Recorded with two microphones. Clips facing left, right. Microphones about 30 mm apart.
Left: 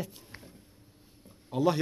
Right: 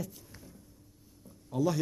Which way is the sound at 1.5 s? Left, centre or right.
Left.